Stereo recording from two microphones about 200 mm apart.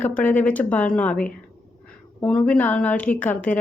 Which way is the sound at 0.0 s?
10° left (ahead or behind).